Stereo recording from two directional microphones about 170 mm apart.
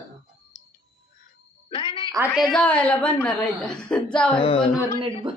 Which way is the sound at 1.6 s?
30° left (ahead or behind).